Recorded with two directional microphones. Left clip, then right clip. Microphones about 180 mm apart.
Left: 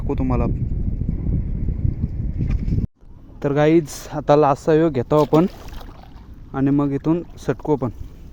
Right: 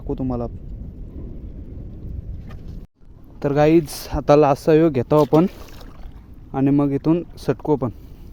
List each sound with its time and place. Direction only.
0.1 s speech: 10° right (ahead or behind)
3.4 s speech: 10° right (ahead or behind)
5.5 s boat: 35° left (ahead or behind)
6.5 s speech: 15° right (ahead or behind)